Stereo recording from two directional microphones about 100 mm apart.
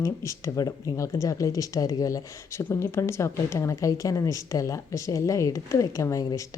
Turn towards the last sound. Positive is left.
turn(degrees=30)  # may be behind; listen again after turning